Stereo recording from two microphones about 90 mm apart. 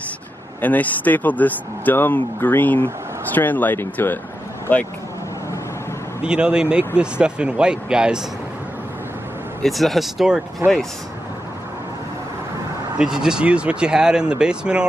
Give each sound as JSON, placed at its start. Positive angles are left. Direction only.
{"t": 0.6, "sound": "speech", "side_deg": 20}
{"t": 6.2, "sound": "speech", "side_deg": -10}
{"t": 9.6, "sound": "speech", "side_deg": 0}
{"t": 10.6, "sound": "speech", "side_deg": -25}
{"t": 12.9, "sound": "speech", "side_deg": -10}